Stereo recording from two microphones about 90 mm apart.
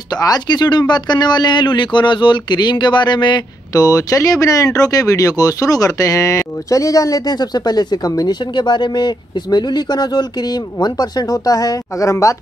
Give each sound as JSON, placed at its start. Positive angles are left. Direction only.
{"t": 0.1, "sound": "speech", "side_deg": 50}
{"t": 3.7, "sound": "speech", "side_deg": 40}